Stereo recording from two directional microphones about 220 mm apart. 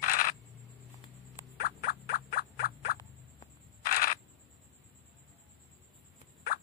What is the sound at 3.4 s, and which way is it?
Camera, 40° left (ahead or behind).